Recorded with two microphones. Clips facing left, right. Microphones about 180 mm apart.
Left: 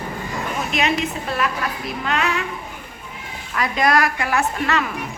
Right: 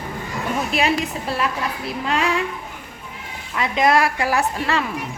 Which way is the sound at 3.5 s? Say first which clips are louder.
Right 1 dB; 25° right (ahead or behind).